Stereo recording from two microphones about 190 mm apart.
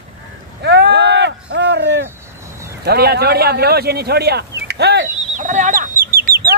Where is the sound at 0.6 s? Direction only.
60° right (ahead or behind).